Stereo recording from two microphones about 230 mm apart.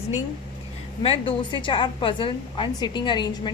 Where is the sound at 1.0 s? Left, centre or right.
Left.